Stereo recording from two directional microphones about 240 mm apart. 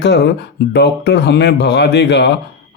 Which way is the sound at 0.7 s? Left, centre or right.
Left.